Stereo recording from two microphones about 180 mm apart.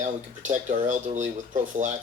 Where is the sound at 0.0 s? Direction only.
45° right (ahead or behind).